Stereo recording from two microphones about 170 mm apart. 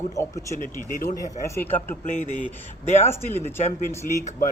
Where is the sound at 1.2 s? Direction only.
15° left (ahead or behind).